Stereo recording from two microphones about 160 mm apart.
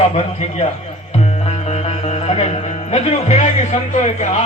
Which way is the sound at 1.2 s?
40° left (ahead or behind).